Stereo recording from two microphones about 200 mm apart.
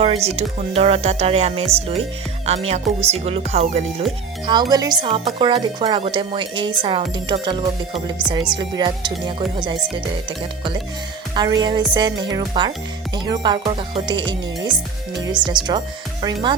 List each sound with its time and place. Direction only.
0.0 s speech: 30° right (ahead or behind)
4.4 s speech: 20° right (ahead or behind)
15.3 s speech: 20° right (ahead or behind)